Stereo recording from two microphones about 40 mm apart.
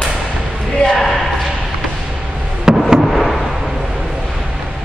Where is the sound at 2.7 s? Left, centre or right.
Centre.